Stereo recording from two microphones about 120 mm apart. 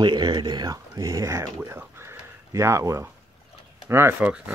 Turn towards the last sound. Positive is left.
turn(degrees=-10)  # may be behind; listen again after turning